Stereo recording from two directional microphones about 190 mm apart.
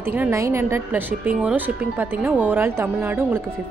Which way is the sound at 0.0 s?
10° right (ahead or behind).